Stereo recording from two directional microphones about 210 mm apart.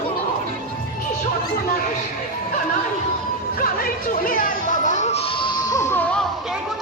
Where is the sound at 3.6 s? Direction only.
40° left (ahead or behind).